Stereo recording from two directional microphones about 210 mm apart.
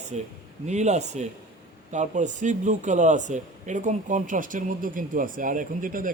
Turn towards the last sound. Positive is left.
turn(degrees=-40)  # may be behind; listen again after turning